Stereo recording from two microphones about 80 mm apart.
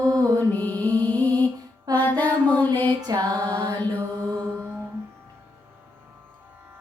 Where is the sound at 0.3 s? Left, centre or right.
Left.